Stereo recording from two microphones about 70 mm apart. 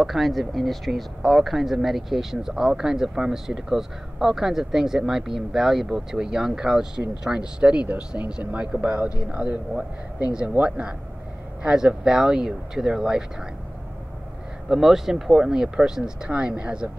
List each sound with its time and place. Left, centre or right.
0.0 s speech: centre
14.7 s speech: centre